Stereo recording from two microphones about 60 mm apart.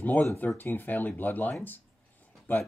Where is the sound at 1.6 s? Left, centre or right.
Left.